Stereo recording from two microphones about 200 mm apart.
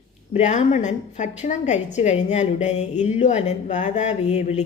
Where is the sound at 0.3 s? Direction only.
35° left (ahead or behind).